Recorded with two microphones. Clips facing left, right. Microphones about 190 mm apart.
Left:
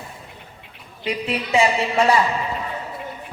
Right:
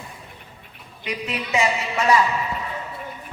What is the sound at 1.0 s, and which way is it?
A man's voice, 30° left (ahead or behind).